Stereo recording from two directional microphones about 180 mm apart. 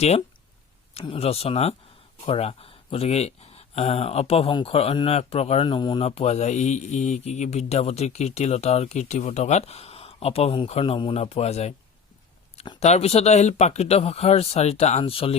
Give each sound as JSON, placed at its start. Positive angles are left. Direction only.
{"t": 0.9, "sound": "speech", "side_deg": 35}